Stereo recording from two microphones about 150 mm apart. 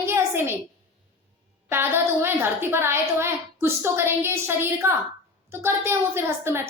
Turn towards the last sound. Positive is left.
turn(degrees=-15)  # may be behind; listen again after turning